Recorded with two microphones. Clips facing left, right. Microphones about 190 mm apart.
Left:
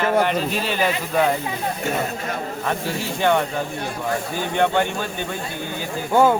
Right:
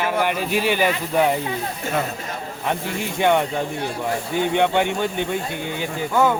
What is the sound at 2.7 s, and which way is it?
Speech, 15° right (ahead or behind).